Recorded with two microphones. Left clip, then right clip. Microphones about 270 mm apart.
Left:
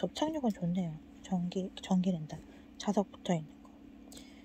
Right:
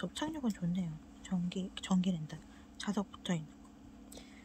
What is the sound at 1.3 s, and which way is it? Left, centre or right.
Speech, right.